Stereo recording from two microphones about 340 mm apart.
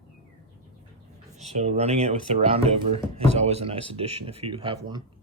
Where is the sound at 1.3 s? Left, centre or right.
Centre.